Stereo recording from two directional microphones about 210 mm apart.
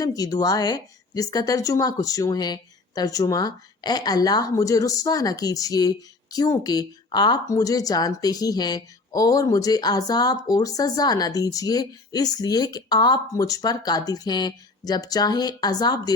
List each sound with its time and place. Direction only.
0.0 s a woman's voice: 15° left (ahead or behind)